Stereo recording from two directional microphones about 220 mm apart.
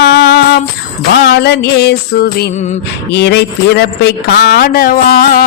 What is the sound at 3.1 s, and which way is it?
Speech, 50° left (ahead or behind).